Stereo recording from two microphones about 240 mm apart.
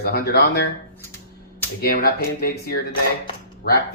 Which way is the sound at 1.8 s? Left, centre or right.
Left.